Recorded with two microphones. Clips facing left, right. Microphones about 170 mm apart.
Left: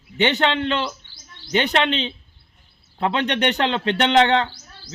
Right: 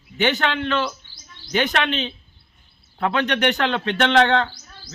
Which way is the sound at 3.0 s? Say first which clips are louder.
Even; 25° left (ahead or behind).